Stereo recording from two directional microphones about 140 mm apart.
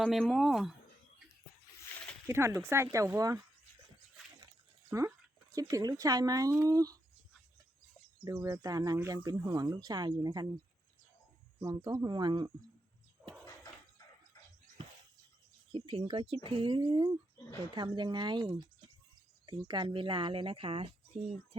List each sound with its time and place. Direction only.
0.0 s speech: 5° left (ahead or behind)
2.2 s speech: 20° right (ahead or behind)
4.9 s speech: 20° right (ahead or behind)
8.2 s speech: 25° right (ahead or behind)
11.6 s speech: 30° right (ahead or behind)
15.7 s speech: 40° right (ahead or behind)